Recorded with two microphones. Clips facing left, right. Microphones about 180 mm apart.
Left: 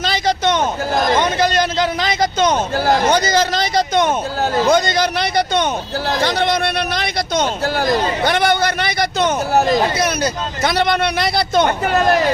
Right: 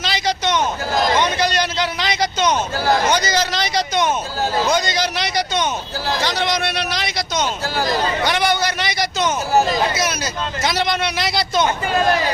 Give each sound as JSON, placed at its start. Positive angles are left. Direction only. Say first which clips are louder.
{"t": 0.0, "sound": "a sound", "louder": "left 4 dB", "side_deg": 50}
{"t": 4.6, "sound": "a man's voice", "louder": "left 7 dB", "side_deg": 55}
{"t": 10.6, "sound": "a man's voice", "louder": "left 4 dB", "side_deg": 55}